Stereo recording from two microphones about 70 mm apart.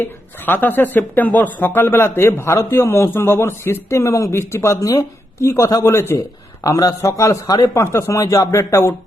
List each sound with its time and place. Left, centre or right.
0.0 s speech: left
6.7 s a man's voice: left
7.0 s speech: left